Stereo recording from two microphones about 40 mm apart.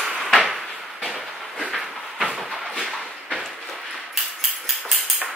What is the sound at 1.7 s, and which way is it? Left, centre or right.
Train, centre.